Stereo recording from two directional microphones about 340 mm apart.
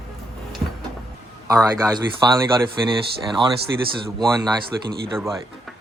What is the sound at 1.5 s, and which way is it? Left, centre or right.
Speech, centre.